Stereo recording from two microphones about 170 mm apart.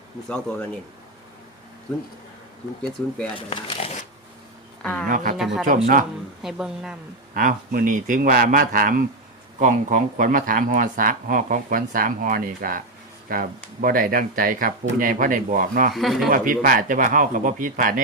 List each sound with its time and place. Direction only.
0.3 s speech: 10° left (ahead or behind)
3.5 s zipper: 35° left (ahead or behind)
4.8 s speech: 10° left (ahead or behind)
5.0 s speech: 55° right (ahead or behind)
6.4 s speech: centre (ahead or behind)
7.3 s speech: 55° right (ahead or behind)
15.9 s speech: centre (ahead or behind)
16.3 s speech: 55° right (ahead or behind)